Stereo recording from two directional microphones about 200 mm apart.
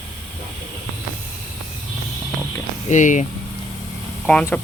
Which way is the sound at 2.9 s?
40° left (ahead or behind).